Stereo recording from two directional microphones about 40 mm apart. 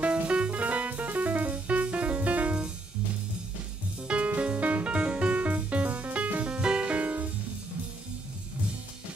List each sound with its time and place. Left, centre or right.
0.0 s music: right
4.4 s music: right
6.9 s music: right